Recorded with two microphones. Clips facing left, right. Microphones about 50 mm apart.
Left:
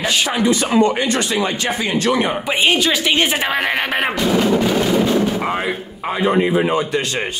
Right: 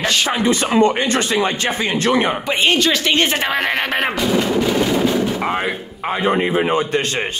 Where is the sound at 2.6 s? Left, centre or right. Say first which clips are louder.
Even; centre.